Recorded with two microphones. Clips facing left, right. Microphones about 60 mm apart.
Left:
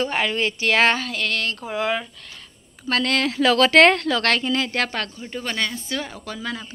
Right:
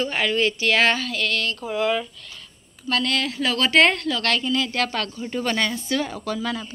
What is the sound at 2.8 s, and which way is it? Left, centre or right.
Speech, left.